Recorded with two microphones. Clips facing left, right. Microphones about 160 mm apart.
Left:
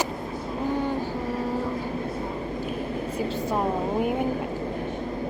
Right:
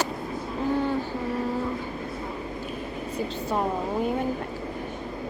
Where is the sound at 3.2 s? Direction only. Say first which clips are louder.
Even; 10° left (ahead or behind).